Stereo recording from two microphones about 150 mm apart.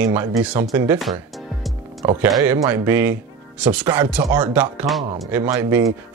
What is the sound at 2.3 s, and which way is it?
Speech, 20° right (ahead or behind).